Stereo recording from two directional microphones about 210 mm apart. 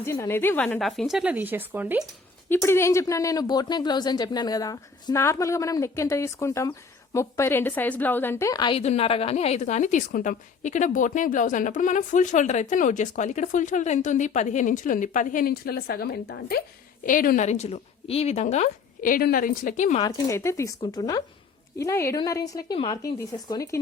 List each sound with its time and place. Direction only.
0.0 s a woman's voice: 10° left (ahead or behind); by 2.0 s 10° right (ahead or behind)
2.5 s speech: 10° left (ahead or behind); by 20.0 s 35° left (ahead or behind)
20.0 s speech: 15° left (ahead or behind)